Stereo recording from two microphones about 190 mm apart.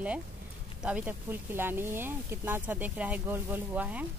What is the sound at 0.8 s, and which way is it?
Speech, 10° right (ahead or behind).